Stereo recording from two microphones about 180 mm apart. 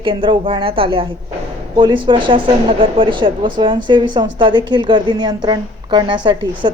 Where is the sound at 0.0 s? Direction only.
25° right (ahead or behind).